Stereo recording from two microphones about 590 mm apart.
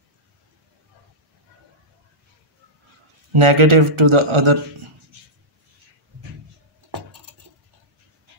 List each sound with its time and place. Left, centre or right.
3.3 s speech: right